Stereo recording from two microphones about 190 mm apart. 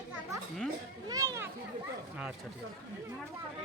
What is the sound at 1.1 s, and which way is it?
Children playing, 20° right (ahead or behind).